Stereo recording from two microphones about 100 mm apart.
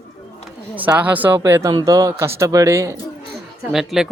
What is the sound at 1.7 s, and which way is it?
Speech, 40° right (ahead or behind).